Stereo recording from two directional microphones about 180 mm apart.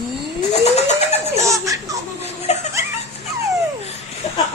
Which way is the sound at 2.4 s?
35° left (ahead or behind).